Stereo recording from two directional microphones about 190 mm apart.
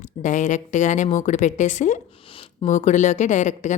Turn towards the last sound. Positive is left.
turn(degrees=40)  # may be behind; listen again after turning